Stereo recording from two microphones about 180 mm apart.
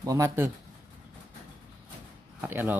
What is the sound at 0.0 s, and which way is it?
Speech, 20° right (ahead or behind).